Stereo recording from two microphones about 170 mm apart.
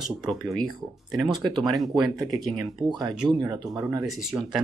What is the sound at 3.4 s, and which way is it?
Speech, 20° right (ahead or behind).